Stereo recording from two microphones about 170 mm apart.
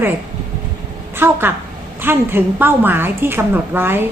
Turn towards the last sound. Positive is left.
turn(degrees=-10)  # may be behind; listen again after turning